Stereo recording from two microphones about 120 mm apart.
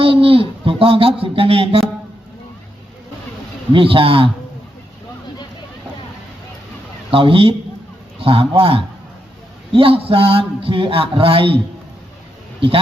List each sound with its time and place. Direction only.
0.0 s a man's voice: 50° right (ahead or behind)
3.7 s a man's voice: 45° right (ahead or behind)
7.1 s a man's voice: 50° right (ahead or behind)